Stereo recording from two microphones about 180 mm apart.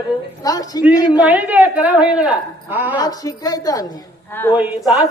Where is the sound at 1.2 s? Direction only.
10° right (ahead or behind).